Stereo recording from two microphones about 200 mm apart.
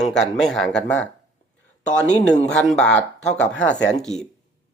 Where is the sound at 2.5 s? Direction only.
5° left (ahead or behind).